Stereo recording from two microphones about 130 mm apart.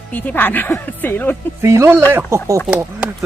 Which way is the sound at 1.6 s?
20° right (ahead or behind).